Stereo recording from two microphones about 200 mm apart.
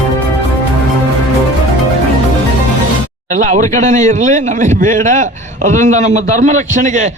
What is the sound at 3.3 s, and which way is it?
A man's voice, 40° right (ahead or behind).